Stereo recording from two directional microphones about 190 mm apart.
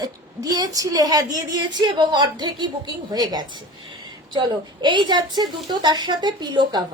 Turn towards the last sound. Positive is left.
turn(degrees=-25)  # may be behind; listen again after turning